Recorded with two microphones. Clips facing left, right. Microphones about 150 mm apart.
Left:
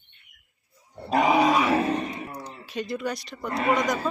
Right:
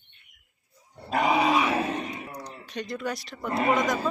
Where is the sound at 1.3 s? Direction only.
35° left (ahead or behind).